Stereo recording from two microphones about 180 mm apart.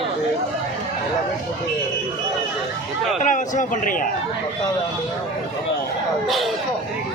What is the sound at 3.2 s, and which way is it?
Speech, 45° left (ahead or behind).